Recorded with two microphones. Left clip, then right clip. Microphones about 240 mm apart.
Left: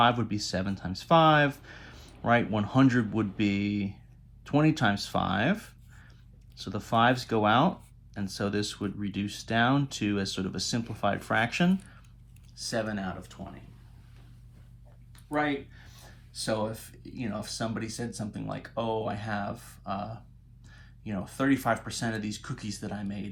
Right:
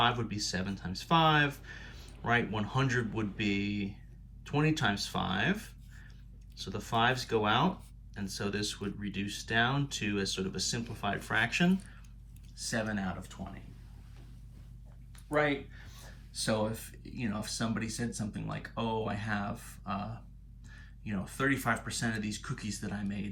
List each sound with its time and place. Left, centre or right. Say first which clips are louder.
0.3 s speech: left 4 dB; left
12.5 s speech: left 3 dB; centre
15.3 s speech: left 1 dB; centre